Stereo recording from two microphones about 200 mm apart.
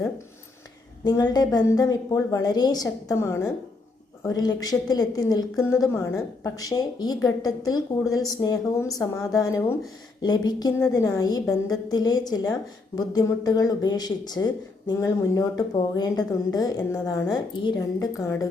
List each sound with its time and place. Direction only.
1.0 s a woman's voice: 20° left (ahead or behind)